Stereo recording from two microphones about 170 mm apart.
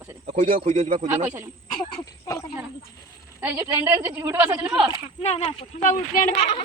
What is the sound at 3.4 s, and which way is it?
A woman's voice, 10° right (ahead or behind).